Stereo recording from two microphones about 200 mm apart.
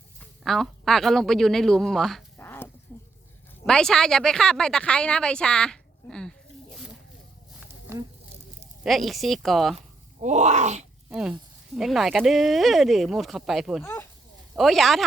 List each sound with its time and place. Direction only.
0.4 s speech: centre (ahead or behind)
2.4 s a sound: 10° left (ahead or behind)
3.7 s speech: 5° left (ahead or behind)
7.6 s a sound: 15° right (ahead or behind)
8.8 s speech: centre (ahead or behind)
10.2 s speech: 35° right (ahead or behind)
11.1 s speech: 5° right (ahead or behind)
13.8 s a sound: 10° left (ahead or behind)
14.5 s speech: centre (ahead or behind)